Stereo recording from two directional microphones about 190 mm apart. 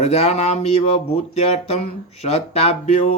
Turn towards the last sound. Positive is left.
turn(degrees=35)  # may be behind; listen again after turning